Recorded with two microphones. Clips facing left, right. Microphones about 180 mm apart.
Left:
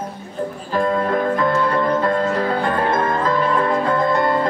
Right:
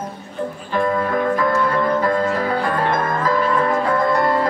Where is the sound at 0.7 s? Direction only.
30° left (ahead or behind).